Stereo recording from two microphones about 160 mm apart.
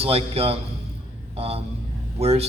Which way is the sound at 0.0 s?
35° right (ahead or behind).